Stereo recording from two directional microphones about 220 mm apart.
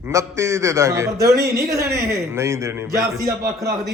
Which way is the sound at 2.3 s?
10° right (ahead or behind).